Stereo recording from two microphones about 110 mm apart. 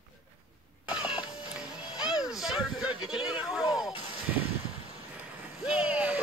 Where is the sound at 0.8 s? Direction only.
10° right (ahead or behind).